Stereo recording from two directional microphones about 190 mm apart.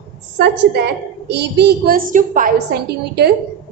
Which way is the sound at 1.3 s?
60° right (ahead or behind).